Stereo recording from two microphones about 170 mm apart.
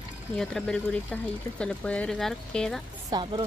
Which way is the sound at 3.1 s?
30° right (ahead or behind).